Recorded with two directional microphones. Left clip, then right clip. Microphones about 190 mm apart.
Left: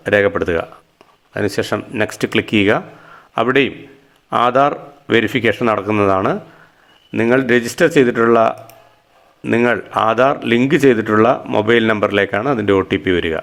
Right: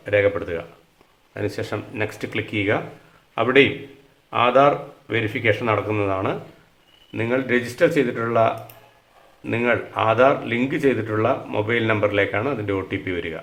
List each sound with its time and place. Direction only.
0.0 s a man's voice: 45° left (ahead or behind)